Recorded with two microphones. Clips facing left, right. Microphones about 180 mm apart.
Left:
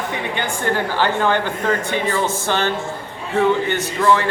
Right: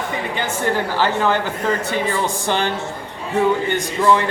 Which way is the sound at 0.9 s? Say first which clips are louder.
Left 1 dB; 5° right (ahead or behind).